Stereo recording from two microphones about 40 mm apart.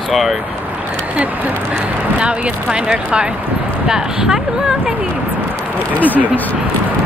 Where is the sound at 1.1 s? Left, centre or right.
Right.